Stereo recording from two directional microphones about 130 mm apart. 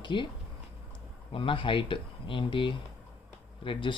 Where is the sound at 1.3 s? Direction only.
40° left (ahead or behind).